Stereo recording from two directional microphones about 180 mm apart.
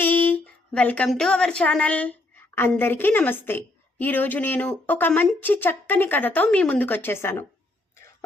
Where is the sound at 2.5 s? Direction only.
10° left (ahead or behind).